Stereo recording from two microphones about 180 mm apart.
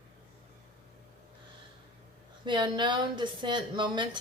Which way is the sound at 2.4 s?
25° right (ahead or behind).